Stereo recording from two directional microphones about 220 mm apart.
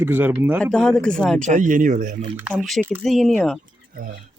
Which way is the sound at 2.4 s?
5° right (ahead or behind).